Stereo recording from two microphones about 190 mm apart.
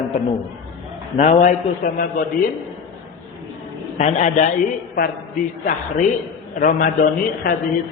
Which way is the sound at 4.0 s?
40° left (ahead or behind).